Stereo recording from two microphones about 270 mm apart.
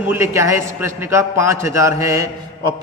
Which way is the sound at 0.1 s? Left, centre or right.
Centre.